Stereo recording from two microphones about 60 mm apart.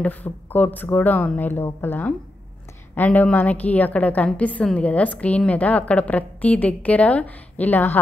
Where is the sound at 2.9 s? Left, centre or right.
Left.